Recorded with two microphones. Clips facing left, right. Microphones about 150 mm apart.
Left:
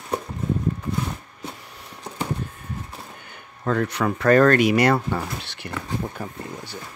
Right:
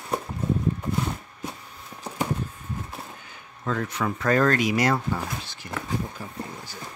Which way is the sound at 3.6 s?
65° left (ahead or behind).